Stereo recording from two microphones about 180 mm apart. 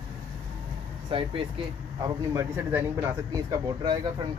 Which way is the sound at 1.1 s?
30° right (ahead or behind).